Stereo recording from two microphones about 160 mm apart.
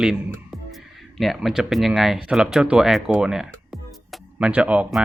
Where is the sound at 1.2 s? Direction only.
Centre (ahead or behind).